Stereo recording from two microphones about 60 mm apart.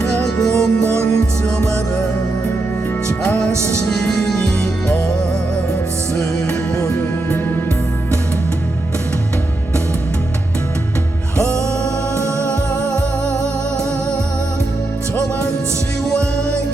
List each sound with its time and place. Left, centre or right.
0.3 s music: centre
3.2 s music: centre